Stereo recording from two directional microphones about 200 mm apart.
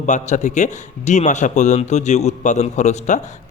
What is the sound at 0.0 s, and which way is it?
A man's voice, 35° left (ahead or behind).